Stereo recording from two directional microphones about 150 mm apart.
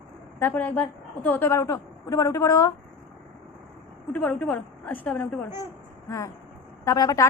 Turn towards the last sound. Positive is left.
turn(degrees=20)  # may be behind; listen again after turning